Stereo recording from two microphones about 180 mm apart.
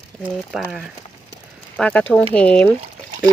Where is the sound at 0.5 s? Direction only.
5° right (ahead or behind).